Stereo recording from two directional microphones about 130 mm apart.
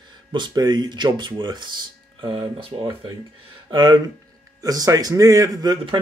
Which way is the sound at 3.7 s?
30° right (ahead or behind).